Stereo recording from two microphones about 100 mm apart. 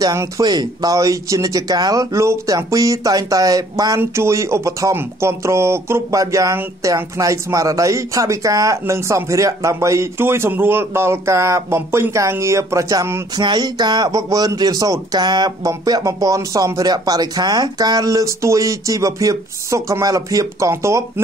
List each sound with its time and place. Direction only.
0.0 s speech: 35° right (ahead or behind)
0.4 s speech: 45° right (ahead or behind)
13.4 s speech: 45° right (ahead or behind); by 21.0 s 30° right (ahead or behind)